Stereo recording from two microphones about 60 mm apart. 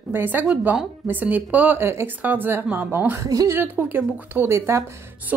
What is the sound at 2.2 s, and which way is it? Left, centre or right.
Speech, right.